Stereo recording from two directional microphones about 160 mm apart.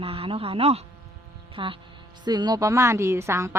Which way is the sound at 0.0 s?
35° right (ahead or behind).